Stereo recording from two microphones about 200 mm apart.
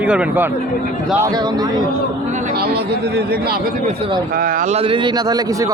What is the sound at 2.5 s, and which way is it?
A man's voice, 50° right (ahead or behind).